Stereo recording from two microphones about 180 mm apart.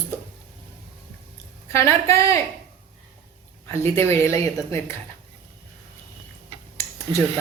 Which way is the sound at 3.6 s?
15° left (ahead or behind).